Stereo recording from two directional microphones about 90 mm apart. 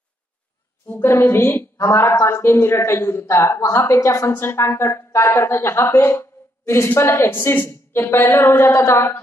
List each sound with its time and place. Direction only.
0.8 s speech: 25° left (ahead or behind)